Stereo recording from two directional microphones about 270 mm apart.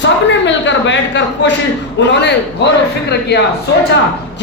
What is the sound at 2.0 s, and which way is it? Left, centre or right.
A woman's voice, left.